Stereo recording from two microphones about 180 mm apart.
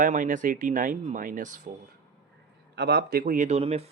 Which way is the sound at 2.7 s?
70° right (ahead or behind).